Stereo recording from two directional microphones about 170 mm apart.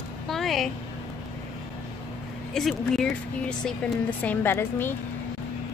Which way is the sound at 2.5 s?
Centre (ahead or behind).